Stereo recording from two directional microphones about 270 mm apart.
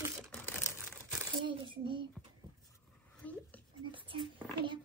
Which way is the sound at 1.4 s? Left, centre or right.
Centre.